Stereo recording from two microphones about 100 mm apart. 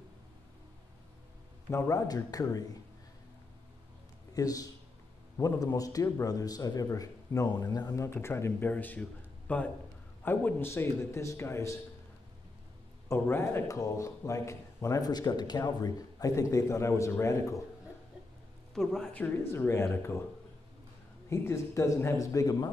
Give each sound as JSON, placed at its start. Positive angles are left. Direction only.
{"t": 1.7, "sound": "speech", "side_deg": 30}
{"t": 4.3, "sound": "a man's voice", "side_deg": 35}
{"t": 13.1, "sound": "a man's voice", "side_deg": 25}
{"t": 18.8, "sound": "speech", "side_deg": 5}
{"t": 19.1, "sound": "a man's voice", "side_deg": 15}
{"t": 21.3, "sound": "speech", "side_deg": 30}